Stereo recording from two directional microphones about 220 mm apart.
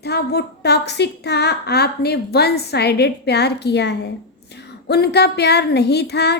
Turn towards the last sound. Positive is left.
turn(degrees=50)  # may be behind; listen again after turning